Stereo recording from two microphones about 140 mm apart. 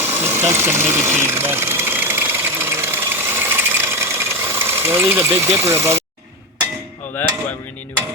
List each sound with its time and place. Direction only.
0.0 s engine: 15° right (ahead or behind)
5.5 s speech: 20° right (ahead or behind)